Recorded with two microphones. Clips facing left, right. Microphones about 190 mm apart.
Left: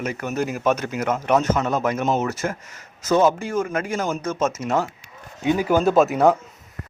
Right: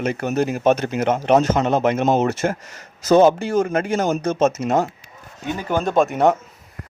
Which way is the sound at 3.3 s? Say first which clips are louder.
Right 5 dB; 70° right (ahead or behind).